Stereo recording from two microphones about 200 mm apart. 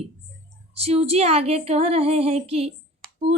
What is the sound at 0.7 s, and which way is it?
Female singing, 30° right (ahead or behind).